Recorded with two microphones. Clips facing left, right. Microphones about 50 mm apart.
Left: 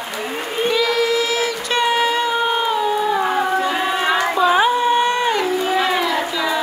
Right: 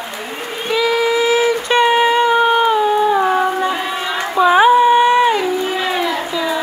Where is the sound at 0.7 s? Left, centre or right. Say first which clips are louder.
Right 3 dB; centre.